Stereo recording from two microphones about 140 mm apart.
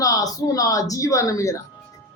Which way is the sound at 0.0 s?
25° left (ahead or behind).